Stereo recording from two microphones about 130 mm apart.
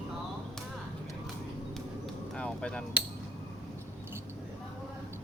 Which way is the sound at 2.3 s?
5° left (ahead or behind).